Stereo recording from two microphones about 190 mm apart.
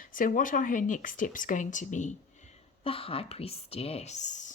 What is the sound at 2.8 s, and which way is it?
Speech, 30° left (ahead or behind).